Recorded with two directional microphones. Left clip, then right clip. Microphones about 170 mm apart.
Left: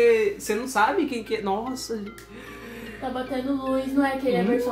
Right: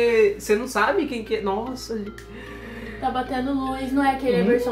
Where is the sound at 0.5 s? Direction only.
15° left (ahead or behind).